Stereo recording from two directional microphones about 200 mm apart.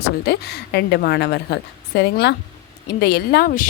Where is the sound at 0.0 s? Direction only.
55° left (ahead or behind).